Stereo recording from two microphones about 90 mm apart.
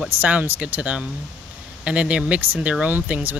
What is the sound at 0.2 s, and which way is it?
Speech, 15° right (ahead or behind).